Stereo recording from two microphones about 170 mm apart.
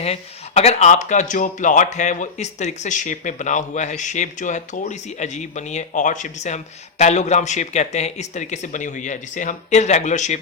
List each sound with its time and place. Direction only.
0.0 s speech: 40° left (ahead or behind)